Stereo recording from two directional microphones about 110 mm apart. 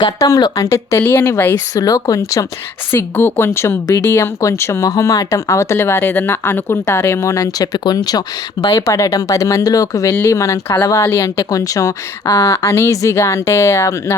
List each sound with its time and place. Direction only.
0.0 s speech: 35° left (ahead or behind)
1.5 s speech: 35° left (ahead or behind)
2.9 s speech: 20° left (ahead or behind)